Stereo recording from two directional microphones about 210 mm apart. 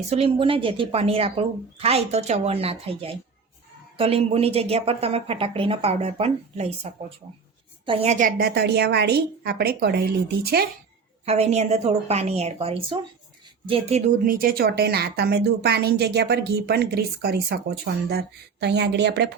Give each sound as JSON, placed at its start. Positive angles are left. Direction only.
{"t": 0.1, "sound": "a woman's voice", "side_deg": -25}
{"t": 7.9, "sound": "a woman's voice", "side_deg": -35}
{"t": 11.3, "sound": "a woman's voice", "side_deg": -30}
{"t": 14.3, "sound": "a woman's voice", "side_deg": -45}